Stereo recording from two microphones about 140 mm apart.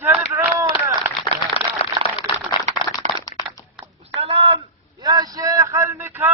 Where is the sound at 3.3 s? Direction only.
25° left (ahead or behind).